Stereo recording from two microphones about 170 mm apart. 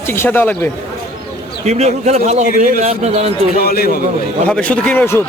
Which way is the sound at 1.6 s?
40° right (ahead or behind).